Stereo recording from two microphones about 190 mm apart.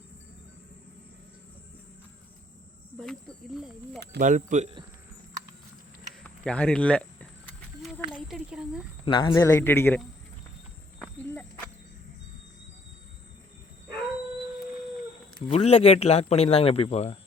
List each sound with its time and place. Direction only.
3.0 s speech: centre (ahead or behind)
4.2 s speech: 40° right (ahead or behind)
6.2 s speech: 5° left (ahead or behind)
8.3 s speech: 5° right (ahead or behind)
9.0 s speech: 25° left (ahead or behind)
9.4 s a man's voice: 15° left (ahead or behind)
15.4 s a man's voice: 30° left (ahead or behind)